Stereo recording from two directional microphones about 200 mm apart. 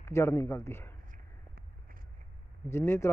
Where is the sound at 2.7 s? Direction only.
10° left (ahead or behind).